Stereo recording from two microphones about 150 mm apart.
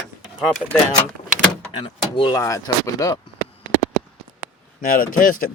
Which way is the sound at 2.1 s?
35° left (ahead or behind).